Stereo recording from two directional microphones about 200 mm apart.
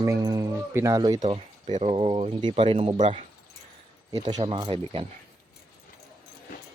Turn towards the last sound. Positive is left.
turn(degrees=-25)  # may be behind; listen again after turning